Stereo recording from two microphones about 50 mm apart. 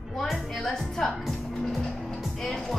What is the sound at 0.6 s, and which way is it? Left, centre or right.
Music, centre.